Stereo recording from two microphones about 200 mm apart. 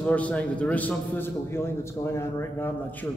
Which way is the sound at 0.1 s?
5° left (ahead or behind).